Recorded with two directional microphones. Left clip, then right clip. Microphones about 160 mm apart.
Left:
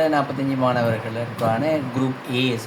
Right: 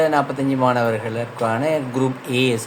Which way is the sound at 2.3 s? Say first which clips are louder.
Right 4 dB; 55° right (ahead or behind).